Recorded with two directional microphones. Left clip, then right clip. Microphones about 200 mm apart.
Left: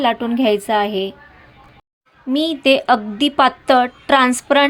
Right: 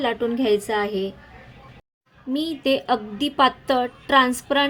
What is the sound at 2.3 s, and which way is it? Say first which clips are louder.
A woman's voice: left 7 dB; 15° left (ahead or behind).